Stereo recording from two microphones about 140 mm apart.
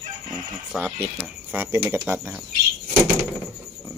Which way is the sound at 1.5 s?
15° right (ahead or behind).